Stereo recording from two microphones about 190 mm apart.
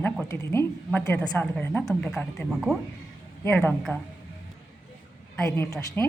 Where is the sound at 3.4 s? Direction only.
10° left (ahead or behind).